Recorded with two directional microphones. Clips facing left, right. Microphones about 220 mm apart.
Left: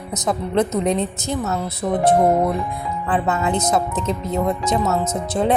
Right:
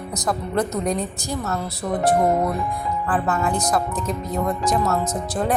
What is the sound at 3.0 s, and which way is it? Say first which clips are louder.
A woman's voice: left 2 dB; 20° left (ahead or behind).